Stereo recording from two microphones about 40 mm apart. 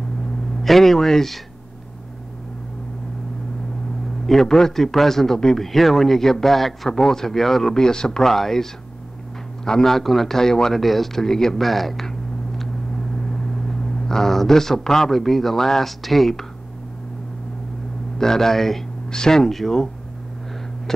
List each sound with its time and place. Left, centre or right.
0.6 s a man's voice: centre
4.3 s a man's voice: centre
9.7 s a man's voice: centre
11.6 s a sound: centre
13.7 s a man's voice: centre
18.1 s a man's voice: centre